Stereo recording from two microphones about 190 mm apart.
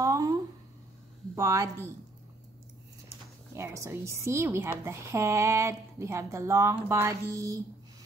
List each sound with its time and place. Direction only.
0.0 s a sound: 20° right (ahead or behind)
1.3 s a woman's voice: 15° right (ahead or behind)
3.5 s a woman's voice: 15° right (ahead or behind)